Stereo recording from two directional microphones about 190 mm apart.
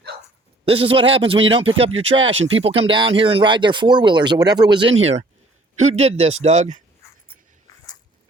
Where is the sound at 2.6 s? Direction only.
30° right (ahead or behind).